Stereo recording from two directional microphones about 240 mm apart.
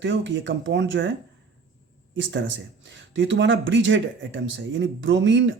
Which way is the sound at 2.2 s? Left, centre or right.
Right.